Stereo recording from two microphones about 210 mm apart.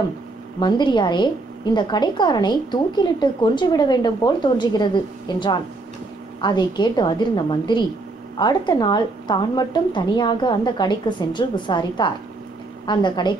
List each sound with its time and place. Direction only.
0.6 s a woman's voice: 20° left (ahead or behind)